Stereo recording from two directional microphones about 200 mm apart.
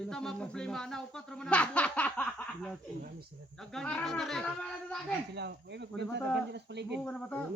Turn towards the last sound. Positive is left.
turn(degrees=5)  # may be behind; listen again after turning